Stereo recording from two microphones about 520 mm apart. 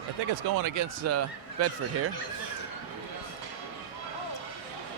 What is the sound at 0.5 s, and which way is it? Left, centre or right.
Speech, right.